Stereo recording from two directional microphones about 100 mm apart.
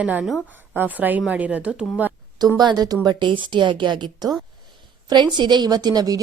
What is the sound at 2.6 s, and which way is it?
A woman's voice, 40° right (ahead or behind).